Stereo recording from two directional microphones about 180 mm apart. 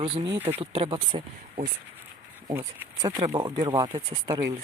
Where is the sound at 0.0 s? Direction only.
30° right (ahead or behind).